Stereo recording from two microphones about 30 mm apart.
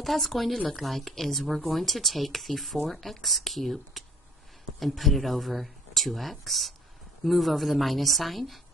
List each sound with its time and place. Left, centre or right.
0.0 s speech: centre